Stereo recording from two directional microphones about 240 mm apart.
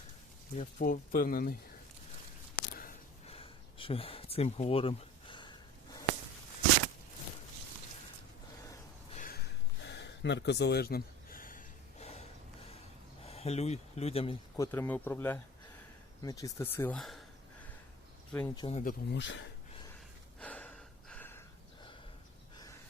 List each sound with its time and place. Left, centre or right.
0.5 s speech: left
3.2 s a sound: left
9.1 s a sound: left
9.8 s a sound: left
13.2 s speech: left
14.5 s speech: centre
18.3 s speech: centre
18.8 s speech: left
20.4 s gasp: centre